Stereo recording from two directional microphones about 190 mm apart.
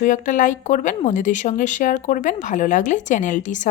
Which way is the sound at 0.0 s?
45° left (ahead or behind).